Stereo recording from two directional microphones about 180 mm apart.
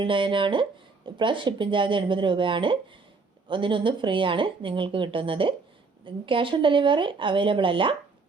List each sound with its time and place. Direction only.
0.0 s speech: 25° right (ahead or behind)